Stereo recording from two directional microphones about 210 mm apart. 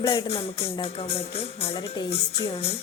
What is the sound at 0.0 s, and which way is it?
Music, 25° left (ahead or behind).